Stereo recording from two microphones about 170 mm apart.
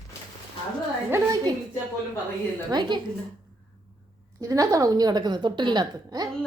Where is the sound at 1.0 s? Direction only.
20° right (ahead or behind).